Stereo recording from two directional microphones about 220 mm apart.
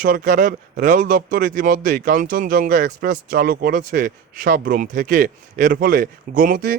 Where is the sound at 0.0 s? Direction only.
40° right (ahead or behind).